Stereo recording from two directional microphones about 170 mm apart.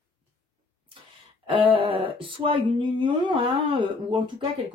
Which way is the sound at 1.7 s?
30° right (ahead or behind).